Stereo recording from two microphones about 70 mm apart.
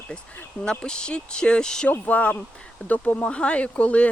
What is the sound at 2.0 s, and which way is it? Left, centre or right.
Speech, left.